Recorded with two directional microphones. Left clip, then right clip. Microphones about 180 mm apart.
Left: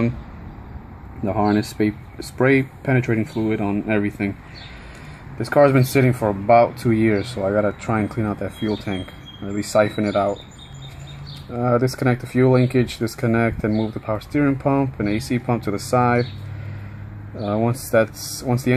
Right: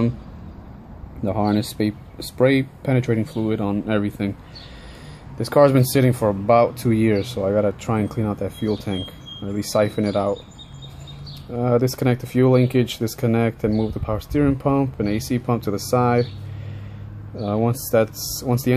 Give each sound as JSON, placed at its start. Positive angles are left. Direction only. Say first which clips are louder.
{"t": 1.2, "sound": "speech", "louder": "left 2 dB", "side_deg": -10}
{"t": 5.4, "sound": "speech", "louder": "even", "side_deg": -20}
{"t": 11.5, "sound": "speech", "louder": "even", "side_deg": -15}
{"t": 17.4, "sound": "speech", "louder": "even", "side_deg": -15}